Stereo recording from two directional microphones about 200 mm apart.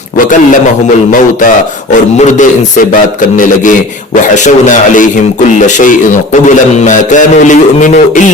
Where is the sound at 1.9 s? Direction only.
40° left (ahead or behind).